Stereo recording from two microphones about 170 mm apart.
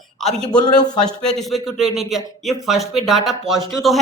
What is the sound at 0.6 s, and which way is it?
Speech, 25° left (ahead or behind).